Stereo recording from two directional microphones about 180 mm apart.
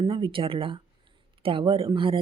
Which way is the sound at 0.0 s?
30° right (ahead or behind).